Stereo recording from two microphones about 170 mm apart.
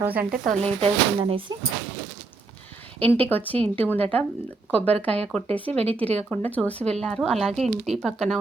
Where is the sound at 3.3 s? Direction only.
10° left (ahead or behind).